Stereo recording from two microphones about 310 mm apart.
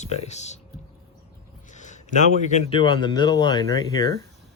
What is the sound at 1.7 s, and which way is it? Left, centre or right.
A man's voice, left.